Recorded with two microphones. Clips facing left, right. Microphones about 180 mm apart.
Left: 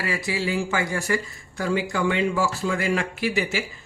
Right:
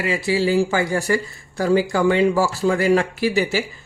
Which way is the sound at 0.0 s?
25° right (ahead or behind).